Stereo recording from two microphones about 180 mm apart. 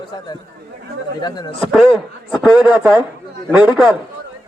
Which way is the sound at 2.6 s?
5° right (ahead or behind).